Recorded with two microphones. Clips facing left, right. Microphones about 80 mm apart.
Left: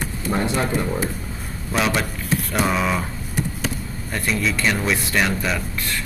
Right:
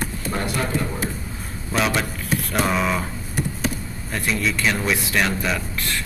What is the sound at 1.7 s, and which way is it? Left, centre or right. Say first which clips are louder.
A man's voice: even; centre.